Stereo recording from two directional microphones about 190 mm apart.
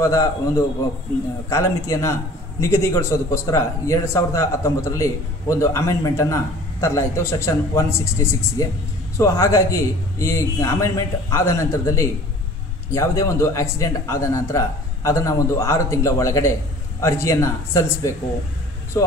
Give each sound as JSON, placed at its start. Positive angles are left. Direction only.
{"t": 0.0, "sound": "a man's voice", "side_deg": 15}